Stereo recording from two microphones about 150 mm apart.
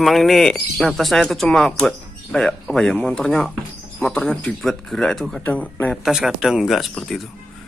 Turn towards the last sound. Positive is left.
turn(degrees=0)  # may be behind; listen again after turning